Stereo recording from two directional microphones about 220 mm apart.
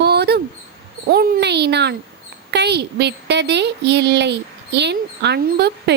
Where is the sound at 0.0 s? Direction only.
50° right (ahead or behind).